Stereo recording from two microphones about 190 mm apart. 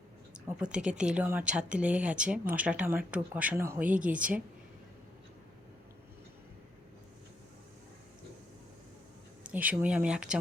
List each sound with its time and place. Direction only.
0.3 s speech: 5° right (ahead or behind)
9.5 s speech: 10° right (ahead or behind)